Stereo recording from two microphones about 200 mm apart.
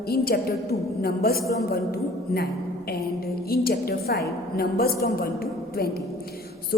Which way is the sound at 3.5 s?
50° left (ahead or behind).